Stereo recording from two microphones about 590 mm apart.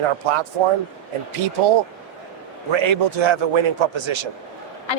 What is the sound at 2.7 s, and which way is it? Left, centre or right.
A man's voice, right.